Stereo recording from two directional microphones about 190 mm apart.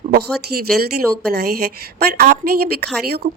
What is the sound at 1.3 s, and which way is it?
Speech, 55° right (ahead or behind).